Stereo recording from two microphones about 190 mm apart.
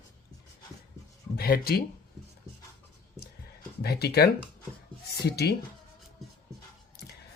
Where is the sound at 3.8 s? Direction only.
55° left (ahead or behind).